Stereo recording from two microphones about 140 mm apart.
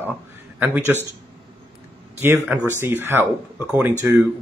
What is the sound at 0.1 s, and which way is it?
Speech, 10° right (ahead or behind).